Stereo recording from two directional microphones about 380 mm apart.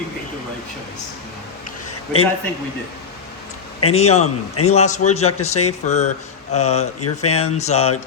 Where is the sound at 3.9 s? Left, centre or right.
Centre.